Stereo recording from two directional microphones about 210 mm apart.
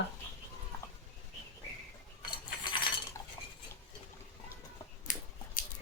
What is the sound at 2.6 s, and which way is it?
Cutlery, 25° left (ahead or behind).